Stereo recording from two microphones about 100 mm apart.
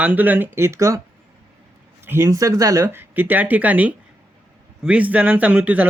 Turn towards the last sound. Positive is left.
turn(degrees=-15)  # may be behind; listen again after turning